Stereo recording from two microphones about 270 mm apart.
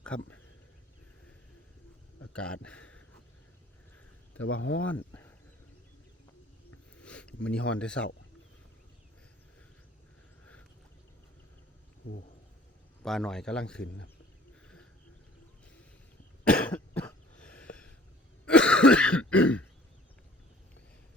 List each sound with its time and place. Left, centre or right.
0.0 s speech: centre
2.3 s a man's voice: centre
4.4 s speech: left
6.9 s a sound: centre
7.4 s a man's voice: centre
13.0 s a man's voice: centre
16.4 s cough: centre